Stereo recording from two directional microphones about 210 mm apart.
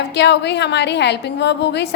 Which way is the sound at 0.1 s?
55° left (ahead or behind).